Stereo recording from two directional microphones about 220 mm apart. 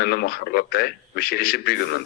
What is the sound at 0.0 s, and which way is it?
A man's voice, 45° left (ahead or behind).